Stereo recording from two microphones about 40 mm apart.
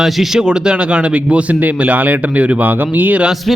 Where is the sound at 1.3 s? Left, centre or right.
Right.